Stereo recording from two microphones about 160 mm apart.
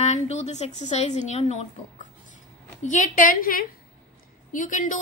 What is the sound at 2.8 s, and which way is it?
A woman's voice, 50° left (ahead or behind).